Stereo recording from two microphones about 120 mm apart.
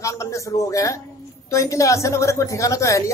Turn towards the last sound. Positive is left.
turn(degrees=25)  # may be behind; listen again after turning